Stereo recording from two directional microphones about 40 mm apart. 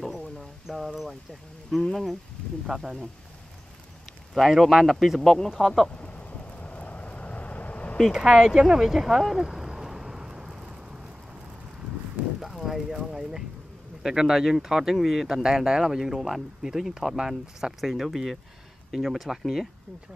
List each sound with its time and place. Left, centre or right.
0.0 s a sound: centre
1.7 s speech: centre
2.6 s speech: centre
4.3 s speech: centre
5.2 s speech: centre
5.9 s vehicle: left
8.1 s speech: centre
9.5 s a sound: centre
12.4 s a sound: centre
14.0 s speech: centre